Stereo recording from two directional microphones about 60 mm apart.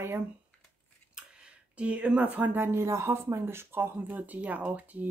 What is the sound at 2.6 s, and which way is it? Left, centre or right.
Speech, right.